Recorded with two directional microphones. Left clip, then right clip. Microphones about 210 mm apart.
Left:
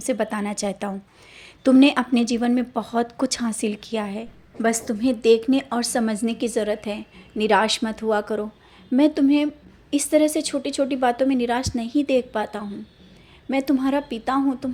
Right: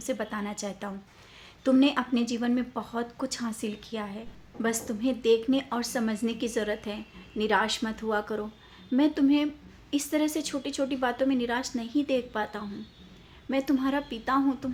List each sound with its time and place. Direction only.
0.0 s a woman's voice: 30° left (ahead or behind)